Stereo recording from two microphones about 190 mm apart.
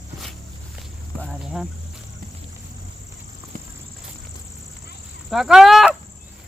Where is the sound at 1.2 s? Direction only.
Centre (ahead or behind).